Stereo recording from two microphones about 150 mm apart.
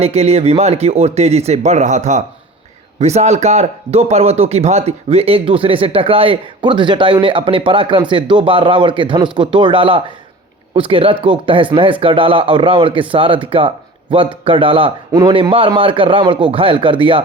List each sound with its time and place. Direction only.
0.0 s a man's voice: 45° right (ahead or behind)